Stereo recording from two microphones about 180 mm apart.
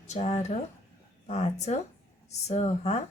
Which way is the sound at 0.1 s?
40° left (ahead or behind).